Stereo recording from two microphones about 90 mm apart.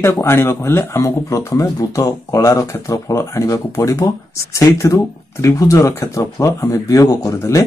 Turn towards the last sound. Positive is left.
turn(degrees=35)  # may be behind; listen again after turning